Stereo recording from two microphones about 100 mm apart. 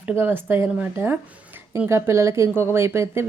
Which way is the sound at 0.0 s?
20° right (ahead or behind).